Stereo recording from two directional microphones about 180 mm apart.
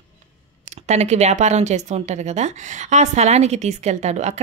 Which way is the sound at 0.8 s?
40° right (ahead or behind).